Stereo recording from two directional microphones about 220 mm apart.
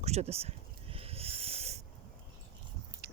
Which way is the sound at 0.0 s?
30° right (ahead or behind).